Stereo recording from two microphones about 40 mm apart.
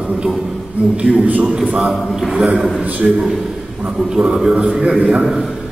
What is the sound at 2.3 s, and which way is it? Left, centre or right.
Speech, right.